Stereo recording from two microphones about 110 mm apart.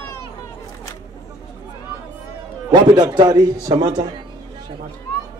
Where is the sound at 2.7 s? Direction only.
40° right (ahead or behind).